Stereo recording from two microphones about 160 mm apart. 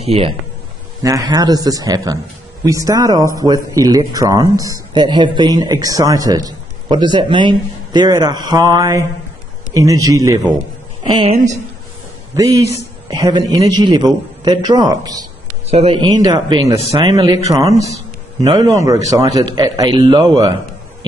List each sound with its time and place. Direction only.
0.0 s speech: 40° right (ahead or behind)
1.0 s speech: 20° right (ahead or behind)
11.3 s speech: 50° right (ahead or behind)
12.4 s speech: 20° right (ahead or behind)
15.7 s speech: 40° right (ahead or behind)
16.0 s speech: 25° right (ahead or behind)